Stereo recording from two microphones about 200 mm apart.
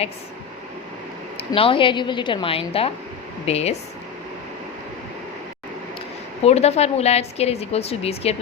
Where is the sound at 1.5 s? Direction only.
25° left (ahead or behind).